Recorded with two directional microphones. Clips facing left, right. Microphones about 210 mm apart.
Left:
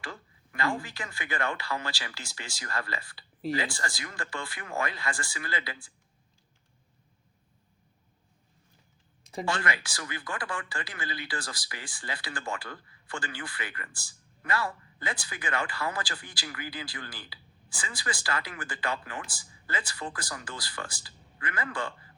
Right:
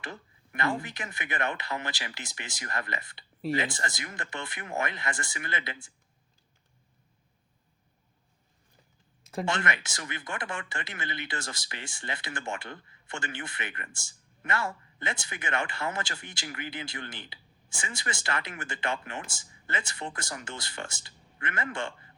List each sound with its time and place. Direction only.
0.0 s speech: 20° right (ahead or behind)
9.5 s speech: 20° right (ahead or behind)